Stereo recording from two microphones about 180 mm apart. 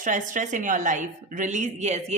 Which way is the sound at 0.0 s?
45° right (ahead or behind).